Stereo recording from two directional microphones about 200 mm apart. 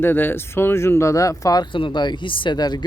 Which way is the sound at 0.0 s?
10° left (ahead or behind).